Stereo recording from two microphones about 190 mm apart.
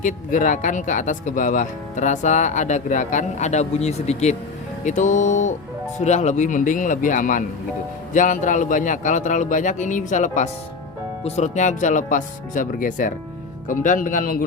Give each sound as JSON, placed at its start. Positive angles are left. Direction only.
{"t": 0.0, "sound": "speech", "side_deg": 40}